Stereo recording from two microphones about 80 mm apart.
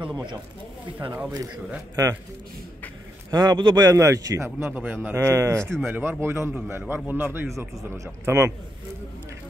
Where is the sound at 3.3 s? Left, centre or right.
Right.